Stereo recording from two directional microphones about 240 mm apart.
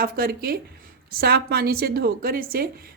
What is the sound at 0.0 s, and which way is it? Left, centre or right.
A woman's voice, right.